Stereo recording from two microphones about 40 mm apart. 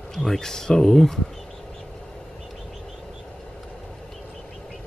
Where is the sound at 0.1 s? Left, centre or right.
Centre.